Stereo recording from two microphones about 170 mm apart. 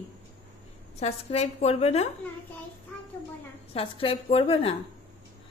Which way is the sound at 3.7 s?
35° left (ahead or behind).